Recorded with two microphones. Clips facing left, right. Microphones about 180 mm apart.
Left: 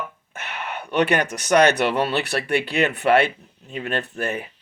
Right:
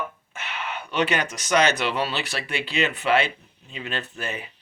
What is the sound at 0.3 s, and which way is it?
Speech, 55° left (ahead or behind).